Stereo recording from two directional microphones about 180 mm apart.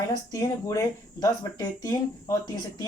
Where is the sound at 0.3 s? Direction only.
20° left (ahead or behind).